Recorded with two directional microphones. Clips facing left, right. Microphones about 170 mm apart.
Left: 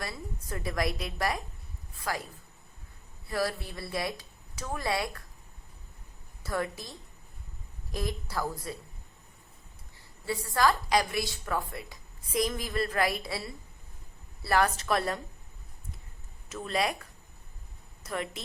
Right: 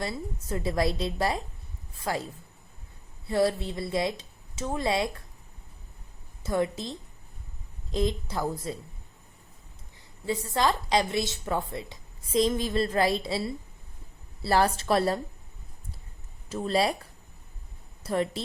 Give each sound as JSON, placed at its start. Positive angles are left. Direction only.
{"t": 0.0, "sound": "a woman's voice", "side_deg": -25}
{"t": 3.2, "sound": "a woman's voice", "side_deg": -25}
{"t": 6.4, "sound": "a woman's voice", "side_deg": -20}
{"t": 7.9, "sound": "a woman's voice", "side_deg": -20}
{"t": 10.2, "sound": "a woman's voice", "side_deg": -20}
{"t": 16.5, "sound": "a woman's voice", "side_deg": -30}